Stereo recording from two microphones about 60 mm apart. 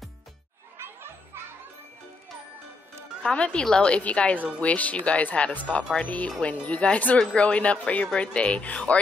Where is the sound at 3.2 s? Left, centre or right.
Centre.